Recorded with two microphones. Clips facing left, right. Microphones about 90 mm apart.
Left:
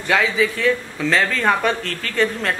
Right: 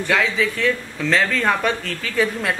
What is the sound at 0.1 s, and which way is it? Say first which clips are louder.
Speech: left 2 dB; centre (ahead or behind).